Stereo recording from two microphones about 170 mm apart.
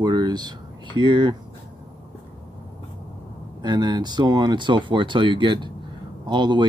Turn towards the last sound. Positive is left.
turn(degrees=-25)  # may be behind; listen again after turning